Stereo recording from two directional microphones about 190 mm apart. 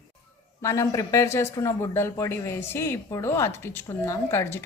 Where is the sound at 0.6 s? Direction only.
15° left (ahead or behind).